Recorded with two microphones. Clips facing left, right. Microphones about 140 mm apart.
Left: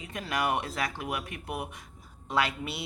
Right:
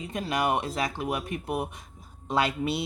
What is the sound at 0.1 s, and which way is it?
Speech, 20° right (ahead or behind).